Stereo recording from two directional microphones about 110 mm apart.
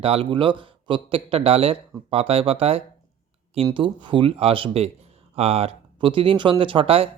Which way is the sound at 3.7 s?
45° right (ahead or behind).